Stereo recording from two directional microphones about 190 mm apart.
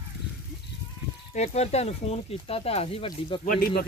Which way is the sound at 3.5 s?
50° left (ahead or behind).